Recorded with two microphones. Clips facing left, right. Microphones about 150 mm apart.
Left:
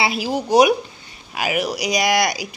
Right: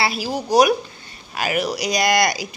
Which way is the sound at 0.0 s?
20° left (ahead or behind).